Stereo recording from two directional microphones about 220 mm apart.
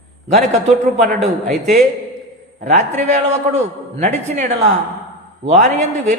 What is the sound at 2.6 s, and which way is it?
A man's voice, 30° right (ahead or behind).